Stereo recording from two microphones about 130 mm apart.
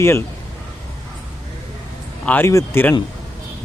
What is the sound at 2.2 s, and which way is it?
Speech, 10° left (ahead or behind).